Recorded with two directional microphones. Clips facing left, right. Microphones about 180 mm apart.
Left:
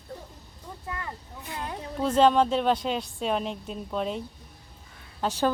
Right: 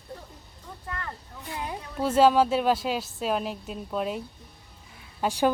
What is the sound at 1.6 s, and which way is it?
A woman's voice, 5° right (ahead or behind).